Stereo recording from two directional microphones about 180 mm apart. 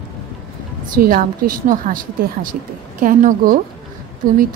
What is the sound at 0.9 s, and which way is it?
A woman's voice, 50° right (ahead or behind).